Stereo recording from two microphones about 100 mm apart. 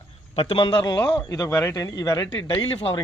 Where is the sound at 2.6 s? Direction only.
60° left (ahead or behind).